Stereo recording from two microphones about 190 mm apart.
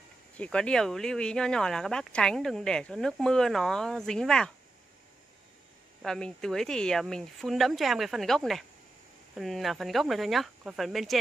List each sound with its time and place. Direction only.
0.4 s speech: 5° left (ahead or behind)
6.0 s speech: 5° left (ahead or behind)